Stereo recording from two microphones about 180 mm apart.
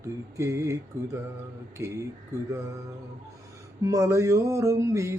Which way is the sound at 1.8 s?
15° right (ahead or behind).